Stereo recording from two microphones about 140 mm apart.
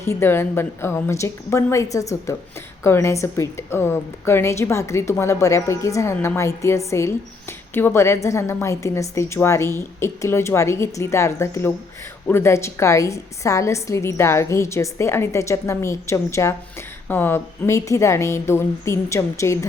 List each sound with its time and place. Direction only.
0.0 s a woman's voice: 15° left (ahead or behind)